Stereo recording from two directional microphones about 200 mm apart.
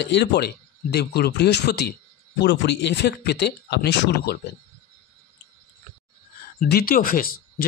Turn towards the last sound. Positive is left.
turn(degrees=45)  # may be behind; listen again after turning